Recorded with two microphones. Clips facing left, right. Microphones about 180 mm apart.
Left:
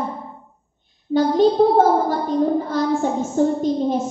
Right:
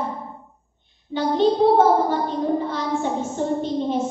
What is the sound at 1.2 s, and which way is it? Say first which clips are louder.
A child's voice: left 4 dB; 40° left (ahead or behind).